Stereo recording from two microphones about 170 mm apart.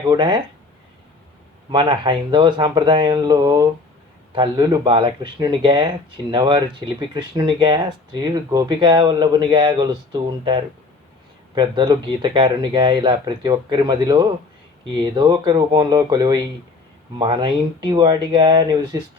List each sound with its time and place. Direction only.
0.1 s speech: 30° right (ahead or behind)
1.7 s speech: 30° right (ahead or behind)